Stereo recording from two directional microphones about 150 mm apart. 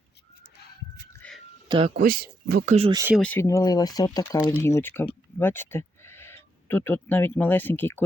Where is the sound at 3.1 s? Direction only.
10° left (ahead or behind).